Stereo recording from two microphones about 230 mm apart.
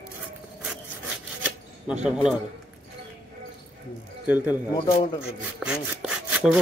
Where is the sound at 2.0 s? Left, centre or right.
Centre.